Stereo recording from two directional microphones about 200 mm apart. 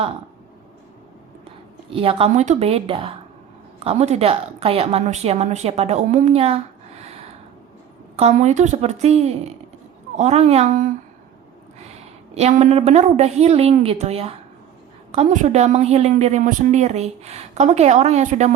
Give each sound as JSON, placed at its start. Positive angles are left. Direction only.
{"t": 1.9, "sound": "a woman's voice", "side_deg": -30}
{"t": 8.1, "sound": "a woman's voice", "side_deg": -35}
{"t": 12.3, "sound": "a woman's voice", "side_deg": -35}